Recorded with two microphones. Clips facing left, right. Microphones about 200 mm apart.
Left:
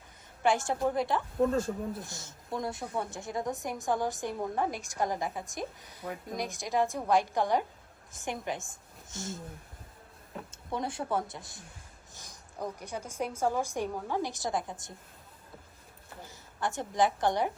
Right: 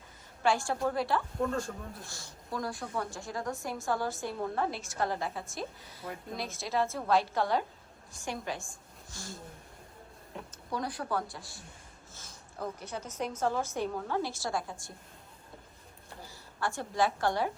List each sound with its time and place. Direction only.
0.4 s speech: 20° left (ahead or behind)
1.5 s speech: 5° left (ahead or behind)
2.0 s a woman's voice: 20° left (ahead or behind)
10.3 s a sound: centre (ahead or behind)
10.7 s a woman's voice: 25° left (ahead or behind)
16.2 s a woman's voice: 20° left (ahead or behind)